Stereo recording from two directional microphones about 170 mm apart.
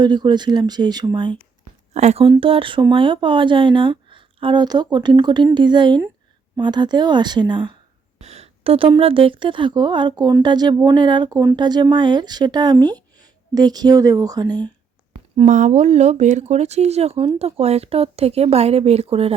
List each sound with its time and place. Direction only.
0.0 s a woman's voice: 25° right (ahead or behind)
1.9 s a woman's voice: 40° right (ahead or behind); by 14.7 s 25° right (ahead or behind)
15.4 s speech: 45° right (ahead or behind)